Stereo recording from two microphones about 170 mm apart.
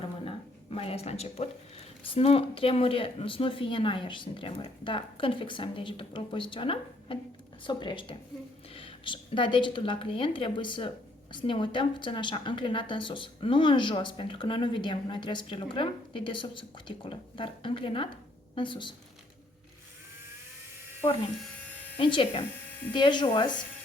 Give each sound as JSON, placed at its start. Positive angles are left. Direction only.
{"t": 0.3, "sound": "a sound", "side_deg": 35}
{"t": 2.0, "sound": "a woman's voice", "side_deg": 35}
{"t": 21.9, "sound": "a woman's voice", "side_deg": 30}